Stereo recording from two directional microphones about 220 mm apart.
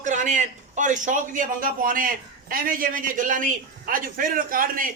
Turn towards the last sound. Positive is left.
turn(degrees=-40)  # may be behind; listen again after turning